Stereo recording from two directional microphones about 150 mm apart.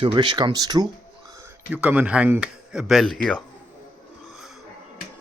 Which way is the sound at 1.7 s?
10° right (ahead or behind).